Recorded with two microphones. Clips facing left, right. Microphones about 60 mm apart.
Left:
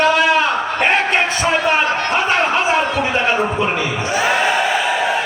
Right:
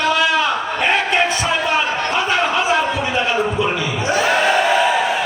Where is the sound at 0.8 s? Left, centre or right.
Left.